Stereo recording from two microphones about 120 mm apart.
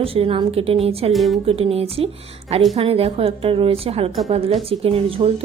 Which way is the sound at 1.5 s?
55° right (ahead or behind).